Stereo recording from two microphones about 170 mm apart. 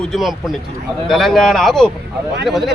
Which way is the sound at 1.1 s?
Centre (ahead or behind).